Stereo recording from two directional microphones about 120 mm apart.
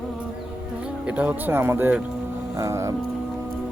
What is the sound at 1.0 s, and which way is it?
Speech, 10° right (ahead or behind).